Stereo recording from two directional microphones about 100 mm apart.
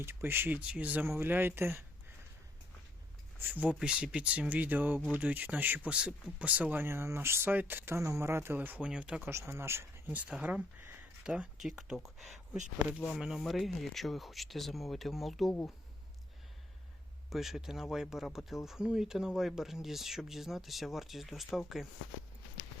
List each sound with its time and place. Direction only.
0.0 s speech: 25° right (ahead or behind)
3.3 s speech: 15° right (ahead or behind)
9.3 s speech: 25° right (ahead or behind); by 11.9 s 5° right (ahead or behind)
13.1 s speech: 5° right (ahead or behind)
17.2 s speech: centre (ahead or behind)